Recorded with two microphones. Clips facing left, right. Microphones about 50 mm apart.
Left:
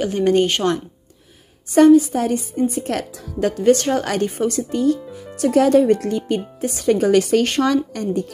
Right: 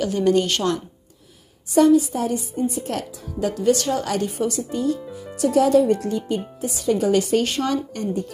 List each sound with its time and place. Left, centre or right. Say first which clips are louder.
0.0 s a woman's voice: left 2 dB; left
1.7 s a woman's voice: left 4 dB; left
3.5 s a woman's voice: left 4 dB; left
7.6 s speech: left 5 dB; left